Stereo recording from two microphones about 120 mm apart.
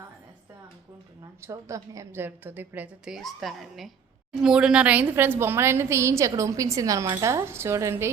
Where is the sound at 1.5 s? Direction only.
25° right (ahead or behind).